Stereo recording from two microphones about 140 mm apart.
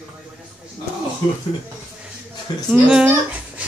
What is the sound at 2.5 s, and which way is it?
Speech, 30° left (ahead or behind).